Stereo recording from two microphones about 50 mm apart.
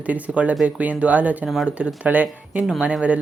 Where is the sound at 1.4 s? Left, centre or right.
Centre.